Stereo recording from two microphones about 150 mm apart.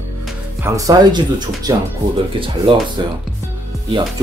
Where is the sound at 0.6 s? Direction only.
25° right (ahead or behind).